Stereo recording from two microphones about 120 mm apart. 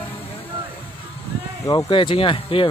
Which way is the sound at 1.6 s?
30° left (ahead or behind).